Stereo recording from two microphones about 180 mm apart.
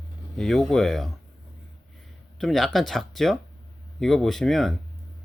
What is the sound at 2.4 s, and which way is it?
Speech, centre (ahead or behind).